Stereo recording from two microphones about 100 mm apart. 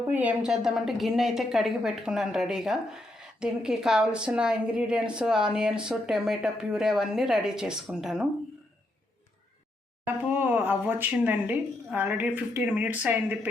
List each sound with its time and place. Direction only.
0.1 s a woman's voice: 15° right (ahead or behind)
10.2 s a woman's voice: 15° right (ahead or behind)